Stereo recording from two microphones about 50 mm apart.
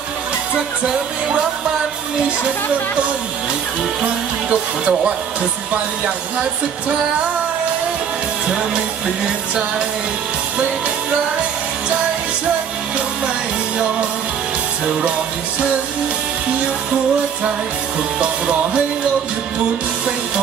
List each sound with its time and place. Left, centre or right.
4.4 s speech: right
18.2 s speech: right